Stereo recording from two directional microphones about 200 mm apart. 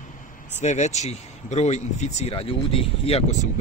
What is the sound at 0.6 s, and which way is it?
Speech, 35° left (ahead or behind).